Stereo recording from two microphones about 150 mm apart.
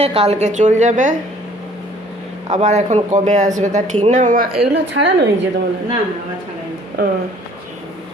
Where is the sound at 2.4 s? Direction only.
50° right (ahead or behind); by 4.6 s 65° right (ahead or behind).